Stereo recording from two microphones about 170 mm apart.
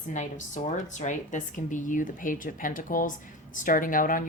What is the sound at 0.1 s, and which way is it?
A woman's voice, 45° left (ahead or behind).